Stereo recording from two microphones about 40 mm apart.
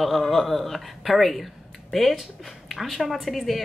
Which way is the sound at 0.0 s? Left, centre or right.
Centre.